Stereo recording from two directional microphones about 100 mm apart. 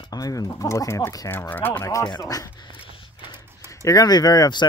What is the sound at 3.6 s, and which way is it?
Speech, 35° left (ahead or behind).